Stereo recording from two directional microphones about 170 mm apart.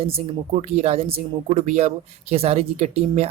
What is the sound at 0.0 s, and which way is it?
Speech, 35° right (ahead or behind).